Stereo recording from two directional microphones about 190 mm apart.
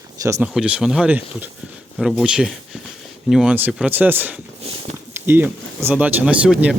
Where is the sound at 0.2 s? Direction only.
15° right (ahead or behind).